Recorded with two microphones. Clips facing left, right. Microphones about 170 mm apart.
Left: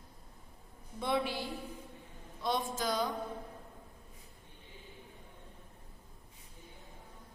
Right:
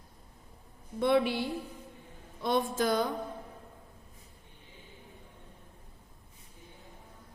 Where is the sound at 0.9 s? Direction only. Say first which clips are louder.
Right 7 dB; 65° right (ahead or behind).